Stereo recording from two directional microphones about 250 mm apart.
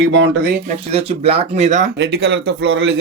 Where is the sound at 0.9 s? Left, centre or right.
Right.